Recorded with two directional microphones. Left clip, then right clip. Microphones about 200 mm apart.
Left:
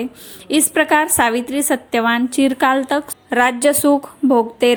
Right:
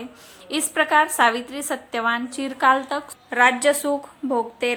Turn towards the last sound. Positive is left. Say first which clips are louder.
# left 9 dB
turn(degrees=30)  # may be behind; listen again after turning